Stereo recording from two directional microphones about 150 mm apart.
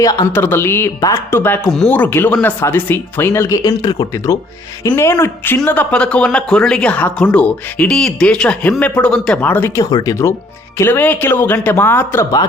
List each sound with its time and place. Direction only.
0.0 s speech: 25° left (ahead or behind)
0.4 s speech: 15° left (ahead or behind)